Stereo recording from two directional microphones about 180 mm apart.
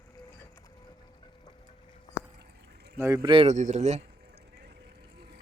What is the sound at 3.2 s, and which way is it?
Speech, 30° right (ahead or behind).